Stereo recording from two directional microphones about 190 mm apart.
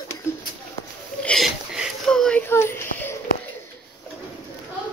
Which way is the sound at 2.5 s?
15° left (ahead or behind).